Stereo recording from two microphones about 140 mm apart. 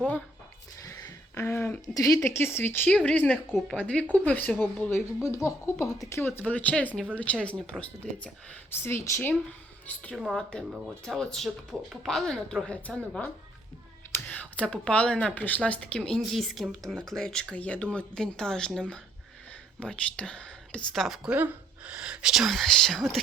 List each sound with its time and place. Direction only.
0.9 s speech: 25° left (ahead or behind); by 8.3 s 5° left (ahead or behind)
8.7 s a woman's voice: 15° left (ahead or behind); by 23.2 s centre (ahead or behind)